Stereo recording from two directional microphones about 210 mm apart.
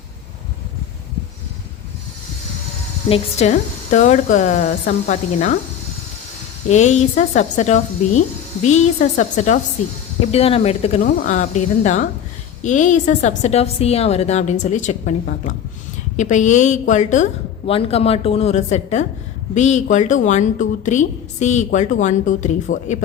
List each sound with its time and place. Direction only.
3.1 s a woman's voice: 30° left (ahead or behind)
6.7 s a woman's voice: 35° left (ahead or behind)
11.0 s a woman's voice: 40° left (ahead or behind)